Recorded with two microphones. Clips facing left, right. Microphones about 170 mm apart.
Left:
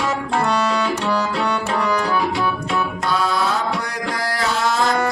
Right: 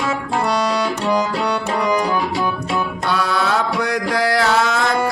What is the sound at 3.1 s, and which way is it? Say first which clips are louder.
Music: right 2 dB; 70° right (ahead or behind).